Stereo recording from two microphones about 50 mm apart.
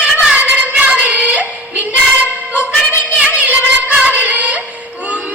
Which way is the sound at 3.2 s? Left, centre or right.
Right.